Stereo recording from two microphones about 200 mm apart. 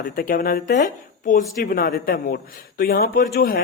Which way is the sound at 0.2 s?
45° left (ahead or behind).